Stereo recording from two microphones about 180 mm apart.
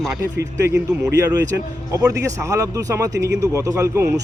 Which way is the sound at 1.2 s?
20° right (ahead or behind).